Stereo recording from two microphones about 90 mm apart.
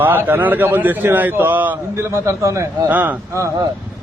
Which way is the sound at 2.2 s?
35° right (ahead or behind).